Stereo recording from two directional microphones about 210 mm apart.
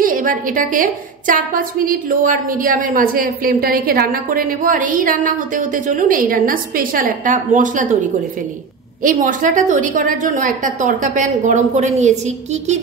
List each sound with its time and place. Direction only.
0.0 s a woman's voice: 40° right (ahead or behind)
9.0 s a woman's voice: 40° right (ahead or behind)